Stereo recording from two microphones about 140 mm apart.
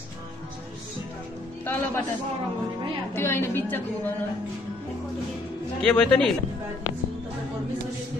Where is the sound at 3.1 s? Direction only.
20° left (ahead or behind).